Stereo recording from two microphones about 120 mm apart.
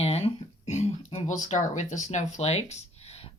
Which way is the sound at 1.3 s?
85° left.